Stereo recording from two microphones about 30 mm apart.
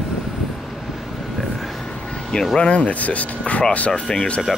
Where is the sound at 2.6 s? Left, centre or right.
Left.